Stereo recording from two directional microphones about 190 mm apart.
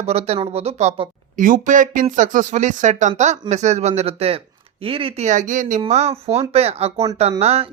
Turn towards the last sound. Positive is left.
turn(degrees=-35)  # may be behind; listen again after turning